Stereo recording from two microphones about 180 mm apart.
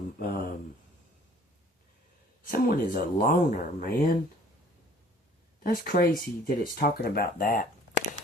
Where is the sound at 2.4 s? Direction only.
50° left (ahead or behind).